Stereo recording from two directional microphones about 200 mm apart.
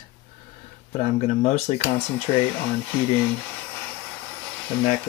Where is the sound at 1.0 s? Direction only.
35° left (ahead or behind).